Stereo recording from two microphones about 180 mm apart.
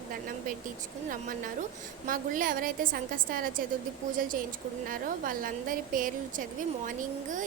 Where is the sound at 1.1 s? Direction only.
50° right (ahead or behind).